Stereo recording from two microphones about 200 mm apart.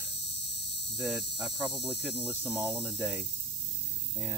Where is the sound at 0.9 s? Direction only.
Centre (ahead or behind).